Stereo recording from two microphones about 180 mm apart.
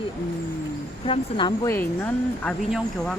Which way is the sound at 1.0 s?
30° left (ahead or behind).